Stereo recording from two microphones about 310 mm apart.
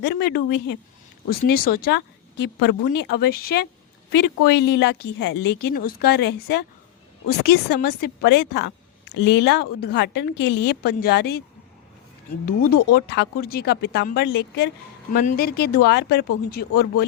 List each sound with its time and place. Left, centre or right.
0.0 s speech: left
4.7 s speech: left
12.5 s speech: left